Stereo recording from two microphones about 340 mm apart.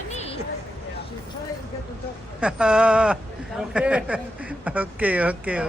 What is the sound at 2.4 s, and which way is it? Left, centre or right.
Speech, centre.